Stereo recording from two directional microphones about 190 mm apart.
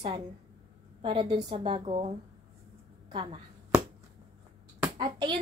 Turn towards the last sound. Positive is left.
turn(degrees=-25)  # may be behind; listen again after turning